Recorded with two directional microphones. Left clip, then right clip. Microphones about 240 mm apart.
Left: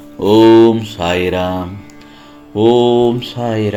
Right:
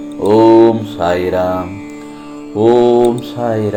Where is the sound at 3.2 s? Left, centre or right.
Left.